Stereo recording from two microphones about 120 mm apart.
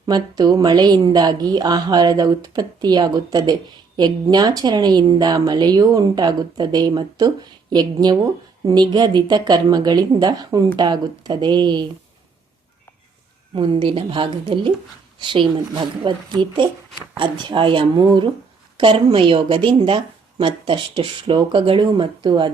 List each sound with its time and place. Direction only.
0.0 s speech: 35° right (ahead or behind)
13.6 s speech: 45° right (ahead or behind)